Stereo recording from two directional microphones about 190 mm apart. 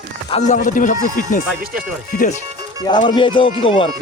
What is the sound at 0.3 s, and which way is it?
Speech, 35° left (ahead or behind).